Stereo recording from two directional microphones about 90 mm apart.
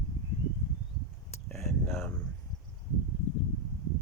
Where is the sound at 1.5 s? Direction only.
5° left (ahead or behind).